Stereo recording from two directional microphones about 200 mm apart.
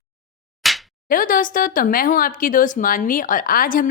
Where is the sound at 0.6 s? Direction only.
Centre (ahead or behind).